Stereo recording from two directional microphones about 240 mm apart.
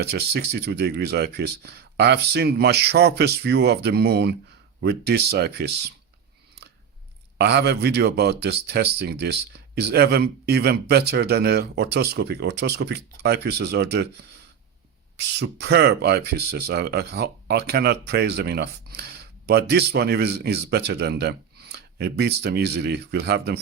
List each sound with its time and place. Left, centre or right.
0.0 s speech: right
7.3 s speech: right